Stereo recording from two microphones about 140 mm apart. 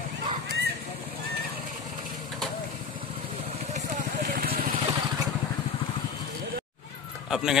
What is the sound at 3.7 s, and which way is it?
Vehicle, 70° right (ahead or behind).